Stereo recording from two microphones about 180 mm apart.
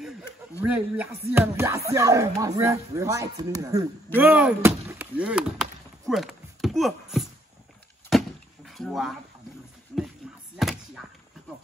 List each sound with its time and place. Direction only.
0.6 s speech: 5° right (ahead or behind)
8.6 s speech: centre (ahead or behind)
10.6 s a sound: centre (ahead or behind)